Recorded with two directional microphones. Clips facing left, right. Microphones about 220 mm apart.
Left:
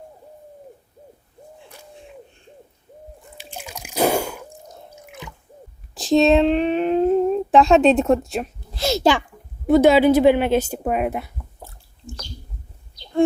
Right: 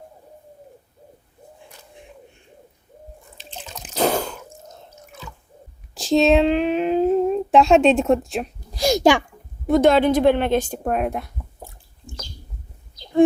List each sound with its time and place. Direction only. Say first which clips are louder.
3.3 s drip: left 2 dB; 10° left (ahead or behind)
5.9 s humming: left 1 dB; centre (ahead or behind)
8.8 s a child's voice: right 2 dB; 15° right (ahead or behind)
9.6 s a woman's voice: left 2 dB; 5° left (ahead or behind)